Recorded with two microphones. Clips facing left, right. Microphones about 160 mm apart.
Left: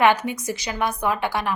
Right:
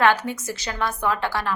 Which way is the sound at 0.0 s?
15° left (ahead or behind).